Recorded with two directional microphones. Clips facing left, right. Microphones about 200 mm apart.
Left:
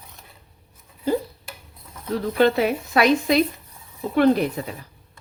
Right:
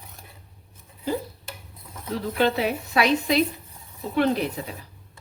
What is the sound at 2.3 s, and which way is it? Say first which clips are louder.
Speech: left 4 dB; 50° left (ahead or behind).